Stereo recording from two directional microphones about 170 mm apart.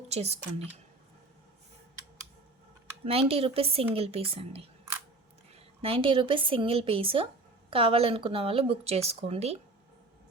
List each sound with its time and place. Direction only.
0.1 s speech: 40° right (ahead or behind)
3.0 s speech: 35° right (ahead or behind)
5.8 s speech: 30° right (ahead or behind)